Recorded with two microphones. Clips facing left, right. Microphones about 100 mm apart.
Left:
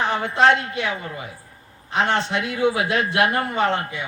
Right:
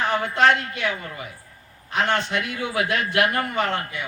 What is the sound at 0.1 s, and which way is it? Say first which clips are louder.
A man's voice: left 1 dB; 25° left (ahead or behind).